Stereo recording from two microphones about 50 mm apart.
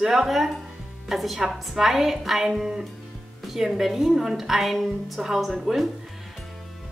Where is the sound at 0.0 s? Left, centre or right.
Centre.